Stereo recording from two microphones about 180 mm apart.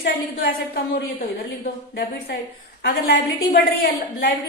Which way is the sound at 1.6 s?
60° left (ahead or behind).